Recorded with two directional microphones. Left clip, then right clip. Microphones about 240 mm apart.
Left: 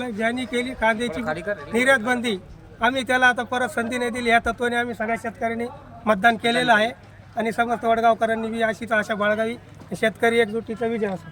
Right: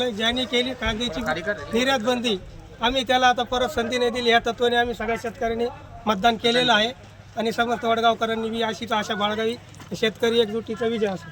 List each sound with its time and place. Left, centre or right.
0.0 s speech: centre
0.8 s a man's voice: centre
1.2 s a man's voice: left
1.7 s a man's voice: centre